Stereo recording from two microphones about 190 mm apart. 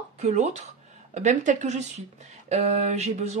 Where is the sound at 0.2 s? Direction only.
35° right (ahead or behind).